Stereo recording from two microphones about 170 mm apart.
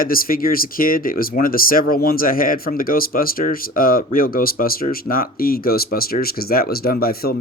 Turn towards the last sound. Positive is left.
turn(degrees=60)  # may be behind; listen again after turning